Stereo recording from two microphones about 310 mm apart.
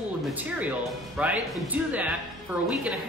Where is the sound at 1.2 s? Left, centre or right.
Centre.